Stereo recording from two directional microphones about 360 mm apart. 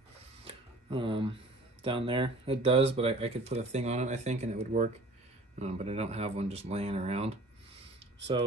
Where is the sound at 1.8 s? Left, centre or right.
Centre.